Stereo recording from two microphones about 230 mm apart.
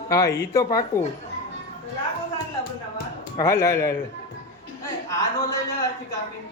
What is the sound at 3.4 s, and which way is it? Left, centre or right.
Speech, centre.